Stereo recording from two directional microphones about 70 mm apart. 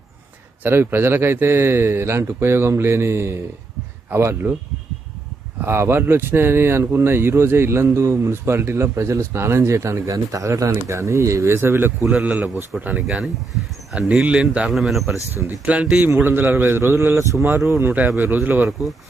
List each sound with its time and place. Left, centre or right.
0.7 s speech: right
5.6 s speech: right
12.1 s a man's voice: centre
14.7 s speech: centre
15.6 s a man's voice: centre
16.1 s speech: right
17.9 s a man's voice: right
18.7 s speech: centre